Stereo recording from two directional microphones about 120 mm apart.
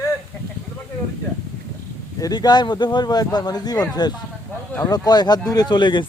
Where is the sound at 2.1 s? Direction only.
30° left (ahead or behind).